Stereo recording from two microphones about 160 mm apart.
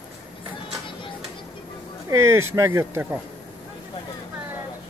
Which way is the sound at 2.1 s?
15° right (ahead or behind).